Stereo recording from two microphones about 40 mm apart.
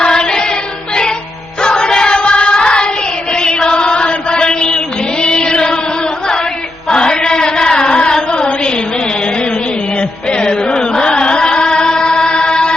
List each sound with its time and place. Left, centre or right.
0.0 s choir: left
1.6 s choir: left
3.3 s chant: left
6.9 s chant: left
10.0 s music: left